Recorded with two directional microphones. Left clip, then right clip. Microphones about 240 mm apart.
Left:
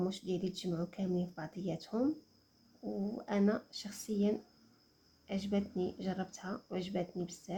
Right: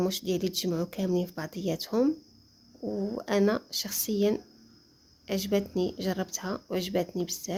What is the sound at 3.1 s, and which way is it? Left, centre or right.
Speech, right.